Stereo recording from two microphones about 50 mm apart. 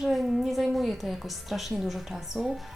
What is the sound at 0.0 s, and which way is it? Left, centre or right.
A woman's voice, centre.